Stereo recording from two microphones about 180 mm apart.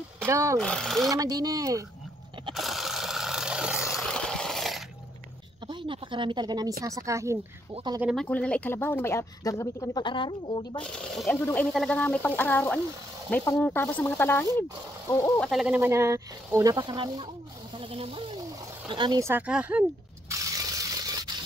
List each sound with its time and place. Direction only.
0.3 s speech: 15° right (ahead or behind)
0.6 s speech: 5° left (ahead or behind)
1.1 s speech: 20° right (ahead or behind)
2.5 s a sound: centre (ahead or behind)
5.7 s a sound: 25° right (ahead or behind)
6.8 s speech: 20° right (ahead or behind)
8.0 s speech: centre (ahead or behind); by 10.8 s 25° left (ahead or behind)
10.8 s speech: 5° left (ahead or behind)
15.4 s speech: 5° right (ahead or behind)
20.7 s a sound: 20° right (ahead or behind)